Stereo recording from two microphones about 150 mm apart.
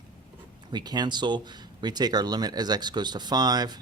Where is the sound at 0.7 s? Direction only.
30° right (ahead or behind).